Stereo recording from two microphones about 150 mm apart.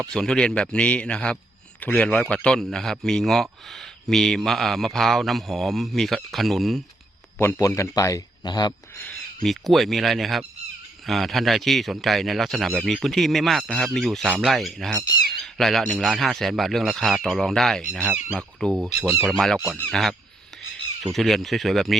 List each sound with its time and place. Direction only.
0.1 s a man's voice: 5° left (ahead or behind)
7.3 s a man's voice: 20° left (ahead or behind)
9.0 s a man's voice: 5° left (ahead or behind)
19.5 s speech: 10° right (ahead or behind)
19.8 s a man's voice: centre (ahead or behind)